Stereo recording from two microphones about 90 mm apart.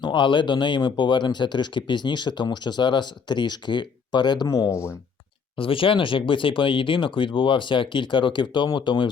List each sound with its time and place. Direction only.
0.0 s speech: 60° left (ahead or behind)
4.4 s speech: 40° left (ahead or behind)
5.5 s speech: 80° left; by 9.0 s 60° left (ahead or behind)